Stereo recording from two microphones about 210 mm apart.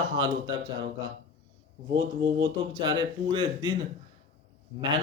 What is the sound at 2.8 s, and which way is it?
Speech, 20° right (ahead or behind).